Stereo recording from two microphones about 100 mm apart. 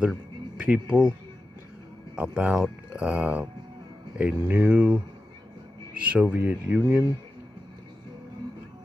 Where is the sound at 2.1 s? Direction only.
15° right (ahead or behind).